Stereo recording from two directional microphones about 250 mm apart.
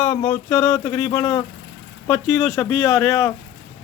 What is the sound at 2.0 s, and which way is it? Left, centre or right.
Speech, centre.